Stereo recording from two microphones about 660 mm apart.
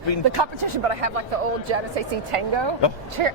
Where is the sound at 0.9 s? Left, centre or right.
Right.